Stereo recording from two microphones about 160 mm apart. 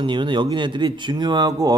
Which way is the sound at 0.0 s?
30° right (ahead or behind).